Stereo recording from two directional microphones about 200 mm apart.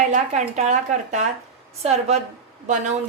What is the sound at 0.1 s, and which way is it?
Speech, 35° right (ahead or behind).